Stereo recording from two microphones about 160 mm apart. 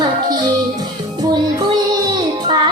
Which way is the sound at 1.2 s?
25° right (ahead or behind).